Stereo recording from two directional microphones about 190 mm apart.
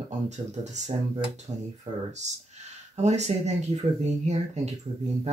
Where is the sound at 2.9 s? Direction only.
35° right (ahead or behind).